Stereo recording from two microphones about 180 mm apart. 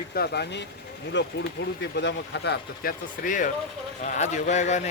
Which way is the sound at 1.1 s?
80° left.